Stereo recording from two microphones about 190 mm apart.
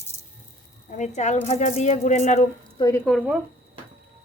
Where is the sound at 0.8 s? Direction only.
40° left (ahead or behind).